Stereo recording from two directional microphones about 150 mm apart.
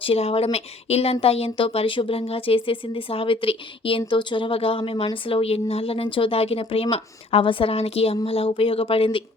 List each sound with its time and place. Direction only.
0.0 s speech: 40° left (ahead or behind)